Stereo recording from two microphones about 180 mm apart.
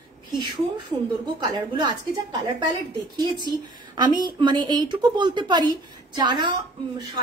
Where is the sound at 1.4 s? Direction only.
25° right (ahead or behind).